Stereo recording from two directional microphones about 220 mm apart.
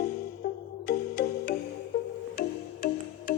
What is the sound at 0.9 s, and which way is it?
Music, 45° left (ahead or behind).